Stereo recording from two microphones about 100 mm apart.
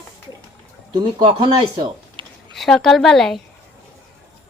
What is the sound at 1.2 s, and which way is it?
Speech, 55° right (ahead or behind).